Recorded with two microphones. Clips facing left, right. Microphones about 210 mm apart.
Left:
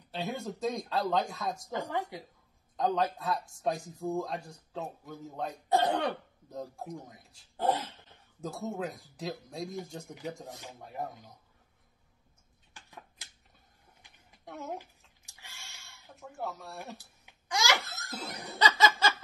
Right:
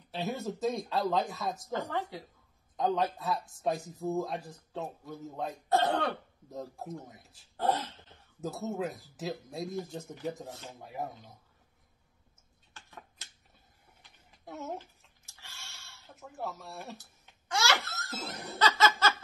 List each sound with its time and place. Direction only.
0.1 s speech: centre (ahead or behind)
1.7 s speech: 15° left (ahead or behind)
2.8 s speech: centre (ahead or behind)
5.7 s speech: 15° left (ahead or behind)
6.5 s speech: centre (ahead or behind)
8.4 s speech: 5° right (ahead or behind)
14.4 s speech: centre (ahead or behind)
14.8 s a sound: 15° left (ahead or behind)
16.1 s speech: centre (ahead or behind)
16.9 s speech: 15° left (ahead or behind)